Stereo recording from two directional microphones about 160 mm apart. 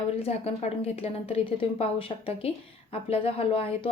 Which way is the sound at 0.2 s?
40° left (ahead or behind).